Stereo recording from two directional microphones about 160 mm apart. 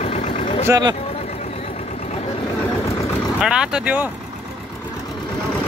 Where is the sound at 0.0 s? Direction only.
40° left (ahead or behind).